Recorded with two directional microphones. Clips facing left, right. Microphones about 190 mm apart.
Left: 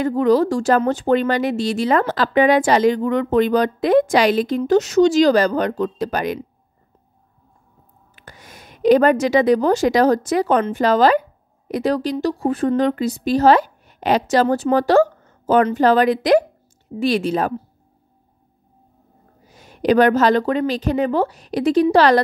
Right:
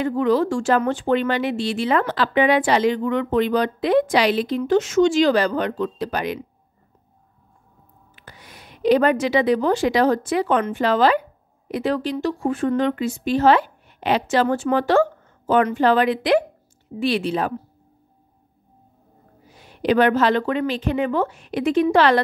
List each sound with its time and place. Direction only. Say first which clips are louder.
0.0 s a woman's voice: left 3 dB; 40° left (ahead or behind)
8.2 s a woman's voice: left 2 dB; 45° left (ahead or behind)
19.5 s a woman's voice: left 3 dB; 45° left (ahead or behind)